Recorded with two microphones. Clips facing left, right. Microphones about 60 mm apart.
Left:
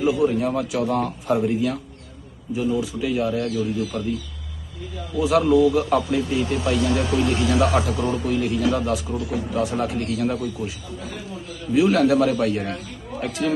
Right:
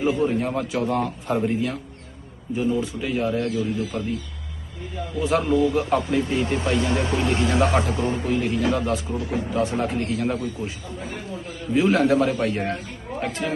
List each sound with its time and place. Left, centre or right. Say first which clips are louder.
0.1 s a man's voice: left 2 dB; right
5.1 s a man's voice: left 4 dB; right